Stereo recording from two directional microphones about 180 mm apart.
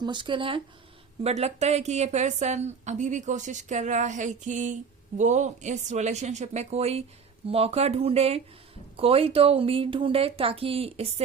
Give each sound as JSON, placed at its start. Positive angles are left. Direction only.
{"t": 0.0, "sound": "a woman's voice", "side_deg": -25}